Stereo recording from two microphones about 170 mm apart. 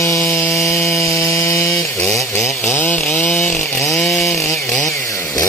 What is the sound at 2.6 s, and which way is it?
Chainsaw, 15° left (ahead or behind).